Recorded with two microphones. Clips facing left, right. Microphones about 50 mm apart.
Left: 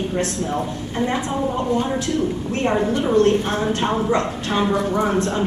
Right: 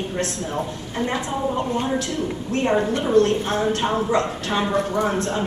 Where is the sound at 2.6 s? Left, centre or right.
Centre.